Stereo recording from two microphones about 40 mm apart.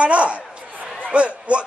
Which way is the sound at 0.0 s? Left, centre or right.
Right.